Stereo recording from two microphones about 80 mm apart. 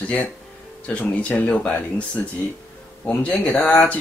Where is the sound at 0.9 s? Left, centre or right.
Centre.